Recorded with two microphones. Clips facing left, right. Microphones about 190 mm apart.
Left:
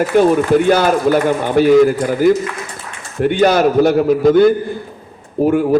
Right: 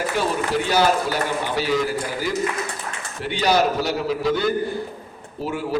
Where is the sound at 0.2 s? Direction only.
50° left (ahead or behind).